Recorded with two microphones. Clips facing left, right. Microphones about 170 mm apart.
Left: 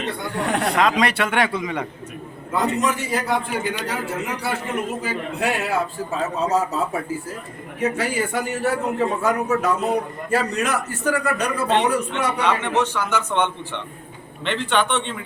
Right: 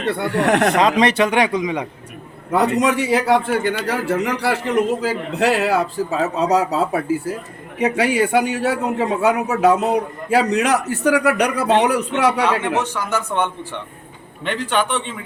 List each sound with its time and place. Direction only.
0.0 s a man's voice: 65° right (ahead or behind)
0.8 s a man's voice: 20° right (ahead or behind)
2.5 s a man's voice: 70° right (ahead or behind)
12.5 s a man's voice: 10° right (ahead or behind)